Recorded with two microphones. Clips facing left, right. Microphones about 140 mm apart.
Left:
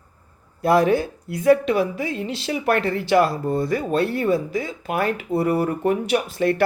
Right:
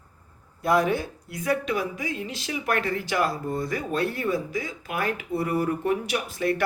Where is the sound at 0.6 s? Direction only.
70° left (ahead or behind).